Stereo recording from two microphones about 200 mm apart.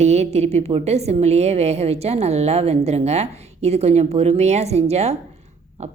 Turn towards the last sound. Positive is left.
turn(degrees=-35)  # may be behind; listen again after turning